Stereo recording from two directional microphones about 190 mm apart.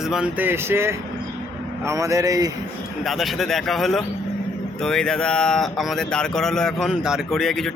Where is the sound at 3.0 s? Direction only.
Centre (ahead or behind).